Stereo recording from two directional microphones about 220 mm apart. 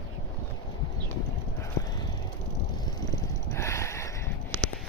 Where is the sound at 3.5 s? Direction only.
10° left (ahead or behind).